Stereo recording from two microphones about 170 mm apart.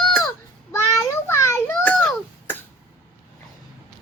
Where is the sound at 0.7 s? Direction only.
15° left (ahead or behind).